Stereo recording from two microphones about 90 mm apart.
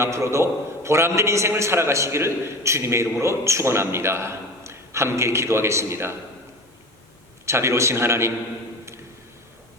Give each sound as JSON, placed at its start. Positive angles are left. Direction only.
{"t": 0.0, "sound": "a man's voice", "side_deg": -30}
{"t": 7.4, "sound": "a man's voice", "side_deg": -30}